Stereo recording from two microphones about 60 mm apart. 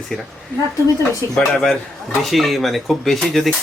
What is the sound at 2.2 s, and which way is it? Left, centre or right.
Speech, centre.